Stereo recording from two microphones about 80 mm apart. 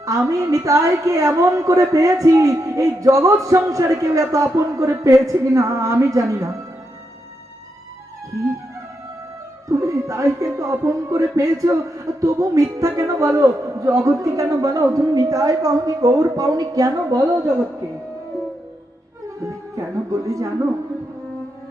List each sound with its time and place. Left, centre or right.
0.0 s a woman's voice: right
9.6 s a woman's voice: right
19.7 s a sound: right